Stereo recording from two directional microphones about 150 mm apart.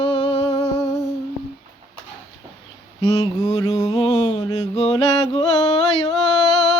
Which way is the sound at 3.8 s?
30° left (ahead or behind).